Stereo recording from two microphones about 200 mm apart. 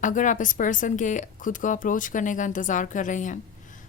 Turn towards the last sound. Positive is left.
turn(degrees=40)  # may be behind; listen again after turning